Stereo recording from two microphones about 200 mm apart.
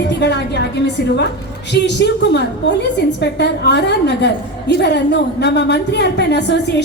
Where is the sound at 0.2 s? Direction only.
55° left (ahead or behind).